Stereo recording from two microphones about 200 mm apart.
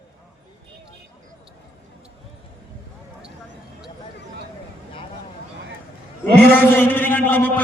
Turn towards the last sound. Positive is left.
turn(degrees=10)  # may be behind; listen again after turning